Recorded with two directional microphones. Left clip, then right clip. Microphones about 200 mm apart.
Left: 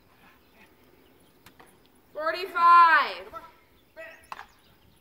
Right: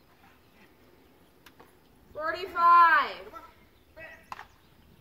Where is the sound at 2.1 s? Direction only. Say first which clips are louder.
Left 3 dB; 15° left (ahead or behind).